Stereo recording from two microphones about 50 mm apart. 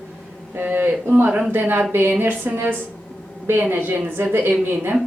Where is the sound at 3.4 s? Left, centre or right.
Right.